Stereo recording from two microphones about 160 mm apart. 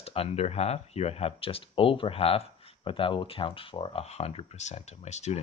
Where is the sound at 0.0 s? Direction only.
40° left (ahead or behind).